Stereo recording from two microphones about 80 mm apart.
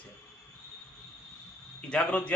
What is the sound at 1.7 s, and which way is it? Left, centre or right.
Speech, centre.